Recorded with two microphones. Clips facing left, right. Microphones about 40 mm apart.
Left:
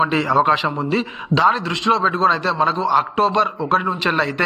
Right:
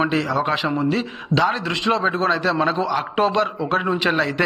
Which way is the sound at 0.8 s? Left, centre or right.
Centre.